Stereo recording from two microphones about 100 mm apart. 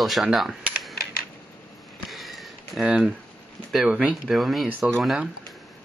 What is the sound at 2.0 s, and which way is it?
Sniff, centre (ahead or behind).